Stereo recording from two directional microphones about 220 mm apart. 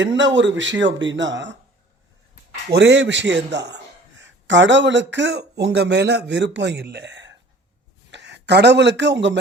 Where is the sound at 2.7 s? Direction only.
50° right (ahead or behind).